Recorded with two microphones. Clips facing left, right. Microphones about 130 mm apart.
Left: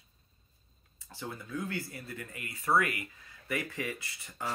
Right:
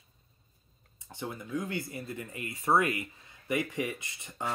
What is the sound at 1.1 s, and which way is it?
Speech, 20° right (ahead or behind).